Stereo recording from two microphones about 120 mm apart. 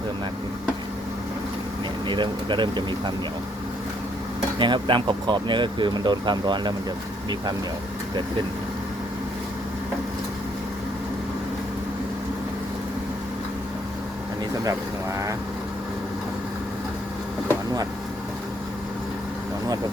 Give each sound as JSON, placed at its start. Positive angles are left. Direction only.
{"t": 2.0, "sound": "speech", "side_deg": -40}
{"t": 4.5, "sound": "speech", "side_deg": -40}